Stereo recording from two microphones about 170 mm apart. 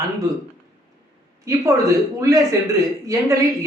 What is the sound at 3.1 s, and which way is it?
Speech, 20° right (ahead or behind).